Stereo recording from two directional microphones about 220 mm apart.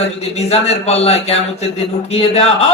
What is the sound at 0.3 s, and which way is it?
A man's voice, 30° left (ahead or behind).